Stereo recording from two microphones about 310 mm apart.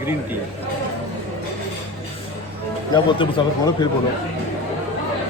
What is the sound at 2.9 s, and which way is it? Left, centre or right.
Speech, centre.